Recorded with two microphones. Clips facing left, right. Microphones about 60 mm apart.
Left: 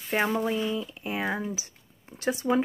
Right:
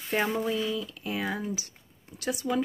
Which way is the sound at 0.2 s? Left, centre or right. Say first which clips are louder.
Left 2 dB; left.